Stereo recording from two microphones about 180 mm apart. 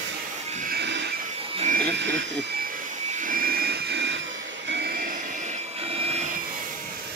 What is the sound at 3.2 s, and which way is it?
Jet engine, 50° right (ahead or behind).